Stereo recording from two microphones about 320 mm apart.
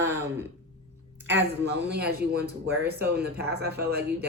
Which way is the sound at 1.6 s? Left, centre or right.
Right.